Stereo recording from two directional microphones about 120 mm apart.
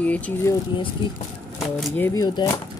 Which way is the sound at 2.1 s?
30° left (ahead or behind).